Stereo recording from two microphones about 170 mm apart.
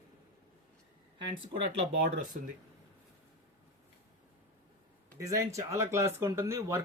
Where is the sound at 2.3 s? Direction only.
50° right (ahead or behind).